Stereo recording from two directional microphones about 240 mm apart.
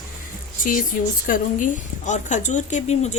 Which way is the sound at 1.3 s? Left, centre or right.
Left.